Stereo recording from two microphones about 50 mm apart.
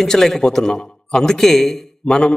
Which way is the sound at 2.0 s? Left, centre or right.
Centre.